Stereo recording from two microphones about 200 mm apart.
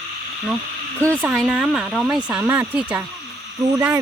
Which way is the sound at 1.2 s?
5° right (ahead or behind).